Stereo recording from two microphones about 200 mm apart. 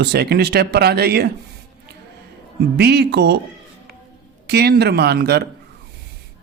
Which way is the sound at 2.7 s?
55° right (ahead or behind).